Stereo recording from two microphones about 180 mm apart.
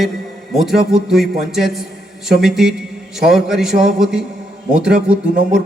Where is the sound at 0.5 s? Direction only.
Centre (ahead or behind).